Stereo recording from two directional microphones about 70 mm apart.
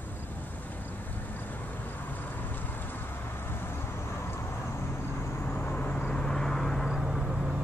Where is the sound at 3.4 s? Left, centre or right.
Left.